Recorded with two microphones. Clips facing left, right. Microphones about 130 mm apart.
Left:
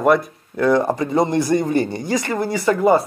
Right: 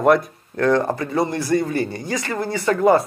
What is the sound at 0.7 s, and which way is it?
Speech, 15° left (ahead or behind).